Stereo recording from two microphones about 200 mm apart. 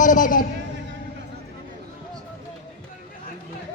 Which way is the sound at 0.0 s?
40° left (ahead or behind).